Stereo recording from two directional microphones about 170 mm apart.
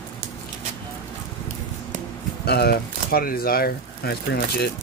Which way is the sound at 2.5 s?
70° left (ahead or behind).